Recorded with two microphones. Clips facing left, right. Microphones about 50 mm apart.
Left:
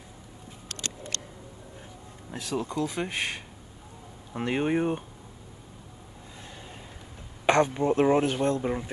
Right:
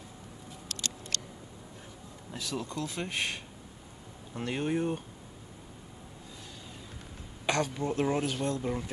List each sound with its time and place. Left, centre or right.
0.7 s a sound: left
2.3 s speech: left
7.4 s a man's voice: left